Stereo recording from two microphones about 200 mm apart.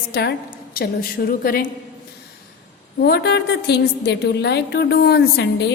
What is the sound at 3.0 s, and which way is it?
A woman's voice, 55° left (ahead or behind).